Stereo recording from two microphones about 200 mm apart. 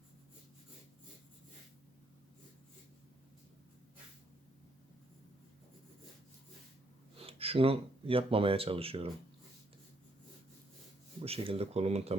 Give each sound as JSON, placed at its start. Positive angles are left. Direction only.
{"t": 7.2, "sound": "speech", "side_deg": -30}
{"t": 11.2, "sound": "speech", "side_deg": -30}